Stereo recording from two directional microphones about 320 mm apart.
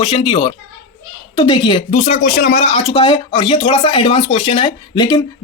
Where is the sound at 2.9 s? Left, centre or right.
Centre.